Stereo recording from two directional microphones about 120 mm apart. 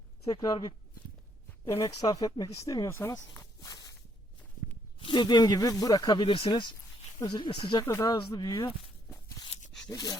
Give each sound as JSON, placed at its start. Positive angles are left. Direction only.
{"t": 0.3, "sound": "speech", "side_deg": 35}
{"t": 4.9, "sound": "speech", "side_deg": 45}
{"t": 7.9, "sound": "speech", "side_deg": 25}
{"t": 9.9, "sound": "speech", "side_deg": 35}